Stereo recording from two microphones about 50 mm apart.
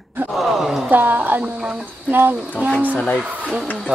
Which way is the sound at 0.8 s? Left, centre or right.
Right.